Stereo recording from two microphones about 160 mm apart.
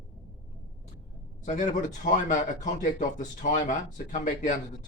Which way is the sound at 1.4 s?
50° left (ahead or behind).